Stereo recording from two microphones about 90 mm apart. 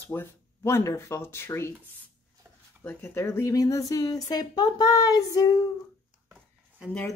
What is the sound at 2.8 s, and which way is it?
Speech, 30° left (ahead or behind).